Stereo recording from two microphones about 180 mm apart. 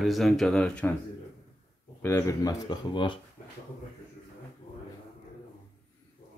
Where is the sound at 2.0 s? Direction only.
15° left (ahead or behind).